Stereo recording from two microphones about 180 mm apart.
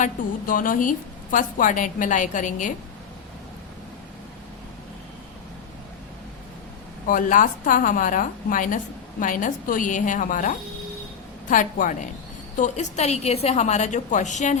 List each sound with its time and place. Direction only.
0.0 s a woman's voice: 50° left (ahead or behind)
7.1 s a woman's voice: 45° left (ahead or behind)